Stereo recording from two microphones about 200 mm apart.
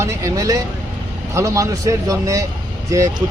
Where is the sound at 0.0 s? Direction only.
15° right (ahead or behind).